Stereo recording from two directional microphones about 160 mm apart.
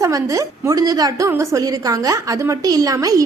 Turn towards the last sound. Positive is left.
turn(degrees=-20)  # may be behind; listen again after turning